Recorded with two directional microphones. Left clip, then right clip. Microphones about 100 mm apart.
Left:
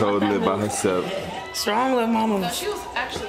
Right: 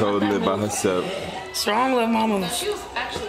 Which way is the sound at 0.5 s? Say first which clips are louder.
Even; centre (ahead or behind).